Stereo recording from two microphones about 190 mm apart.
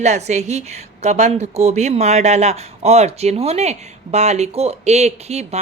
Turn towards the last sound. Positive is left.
turn(degrees=-35)  # may be behind; listen again after turning